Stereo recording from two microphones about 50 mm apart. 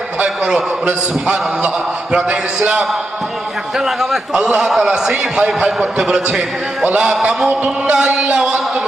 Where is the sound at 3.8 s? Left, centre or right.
Centre.